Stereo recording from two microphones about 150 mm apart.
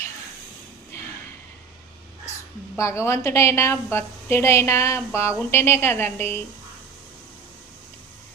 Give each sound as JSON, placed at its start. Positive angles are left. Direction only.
{"t": 2.7, "sound": "a woman's voice", "side_deg": 20}